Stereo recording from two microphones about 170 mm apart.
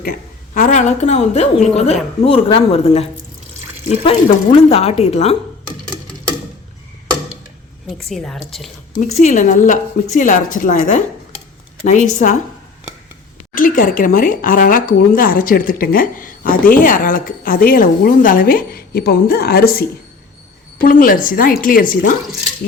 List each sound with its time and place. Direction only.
0.0 s a woman's voice: 55° left (ahead or behind); by 5.4 s 35° left (ahead or behind)
7.9 s a woman's voice: centre (ahead or behind)
9.0 s a woman's voice: 45° left (ahead or behind)
13.5 s speech: 55° left (ahead or behind)
20.8 s speech: 55° left (ahead or behind)